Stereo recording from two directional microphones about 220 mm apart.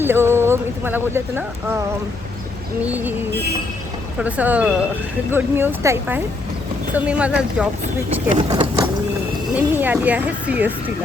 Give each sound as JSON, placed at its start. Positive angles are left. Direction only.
{"t": 0.0, "sound": "speech", "side_deg": -10}
{"t": 2.8, "sound": "speech", "side_deg": -10}
{"t": 4.2, "sound": "speech", "side_deg": -5}
{"t": 8.3, "sound": "speech", "side_deg": -30}
{"t": 9.6, "sound": "speech", "side_deg": -10}